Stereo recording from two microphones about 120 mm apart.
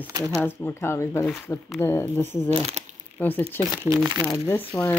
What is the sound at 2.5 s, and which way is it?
Speech, 60° right (ahead or behind).